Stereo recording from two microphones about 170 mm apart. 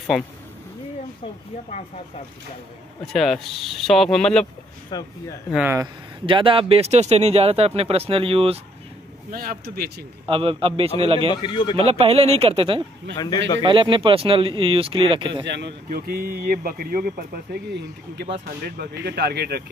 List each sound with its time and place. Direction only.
3.1 s speech: centre (ahead or behind)
4.9 s a man's voice: 25° left (ahead or behind)
6.2 s speech: 30° right (ahead or behind)
9.3 s speech: 60° right (ahead or behind)
10.2 s speech: 35° right (ahead or behind)
11.4 s a man's voice: 30° left (ahead or behind)
11.7 s speech: 35° right (ahead or behind)
13.1 s a man's voice: 20° left (ahead or behind)
13.6 s speech: 30° right (ahead or behind)
15.4 s speech: 90° right
15.9 s speech: 60° right (ahead or behind)
17.7 s speech: 90° right; by 19.6 s 70° right (ahead or behind)